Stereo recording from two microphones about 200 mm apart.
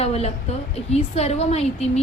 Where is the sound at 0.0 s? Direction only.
30° left (ahead or behind).